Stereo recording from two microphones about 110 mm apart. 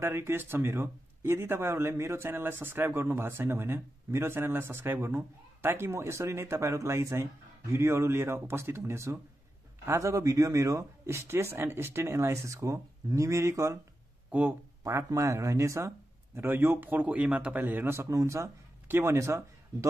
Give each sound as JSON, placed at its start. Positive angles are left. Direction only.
{"t": 0.0, "sound": "speech", "side_deg": -25}
{"t": 14.8, "sound": "speech", "side_deg": -30}